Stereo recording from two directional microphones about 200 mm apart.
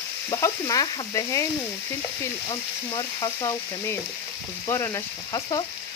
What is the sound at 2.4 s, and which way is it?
Frying, 20° left (ahead or behind).